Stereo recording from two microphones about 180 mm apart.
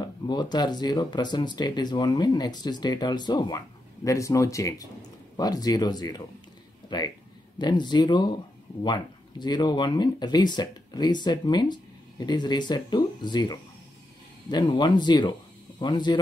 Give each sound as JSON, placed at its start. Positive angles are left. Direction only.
{"t": 0.0, "sound": "speech", "side_deg": 25}